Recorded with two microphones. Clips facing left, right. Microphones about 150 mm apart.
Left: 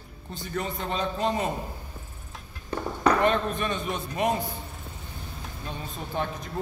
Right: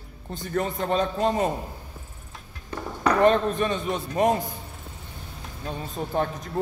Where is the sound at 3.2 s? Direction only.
35° right (ahead or behind).